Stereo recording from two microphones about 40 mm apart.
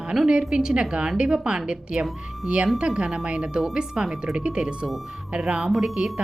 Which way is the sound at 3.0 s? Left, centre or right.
Right.